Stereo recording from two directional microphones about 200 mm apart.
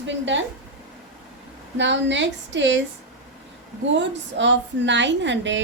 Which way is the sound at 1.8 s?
65° right (ahead or behind).